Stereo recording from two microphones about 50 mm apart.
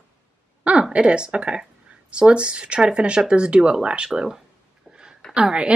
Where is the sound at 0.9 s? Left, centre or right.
Right.